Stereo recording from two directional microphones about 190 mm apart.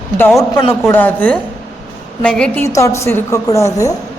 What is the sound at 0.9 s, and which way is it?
A woman's voice, 10° left (ahead or behind).